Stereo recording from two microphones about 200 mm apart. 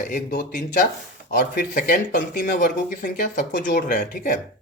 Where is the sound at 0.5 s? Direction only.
40° left (ahead or behind).